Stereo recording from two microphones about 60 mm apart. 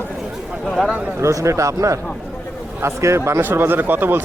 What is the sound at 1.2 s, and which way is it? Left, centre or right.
A man's voice, right.